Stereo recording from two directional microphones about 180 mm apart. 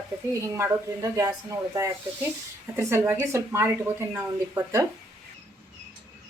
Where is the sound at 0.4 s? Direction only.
15° right (ahead or behind).